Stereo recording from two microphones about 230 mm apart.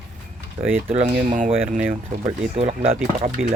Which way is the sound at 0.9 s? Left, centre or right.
Right.